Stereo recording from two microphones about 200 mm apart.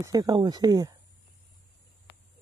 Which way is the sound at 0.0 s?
20° right (ahead or behind).